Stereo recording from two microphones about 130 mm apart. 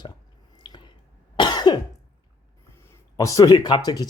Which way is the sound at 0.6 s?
35° left (ahead or behind).